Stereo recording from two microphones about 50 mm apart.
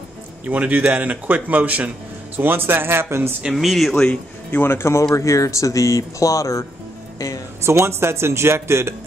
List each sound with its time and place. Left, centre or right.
0.5 s speech: right
2.3 s speech: right
3.5 s speech: centre
3.9 s speech: centre
4.5 s speech: left
5.1 s speech: left
7.6 s speech: right